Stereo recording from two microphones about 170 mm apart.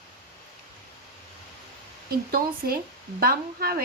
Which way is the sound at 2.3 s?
60° right (ahead or behind).